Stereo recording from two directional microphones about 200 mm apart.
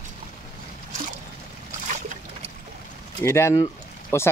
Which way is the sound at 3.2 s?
15° left (ahead or behind).